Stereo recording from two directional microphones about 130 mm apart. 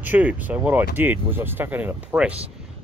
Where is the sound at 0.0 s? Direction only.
10° right (ahead or behind).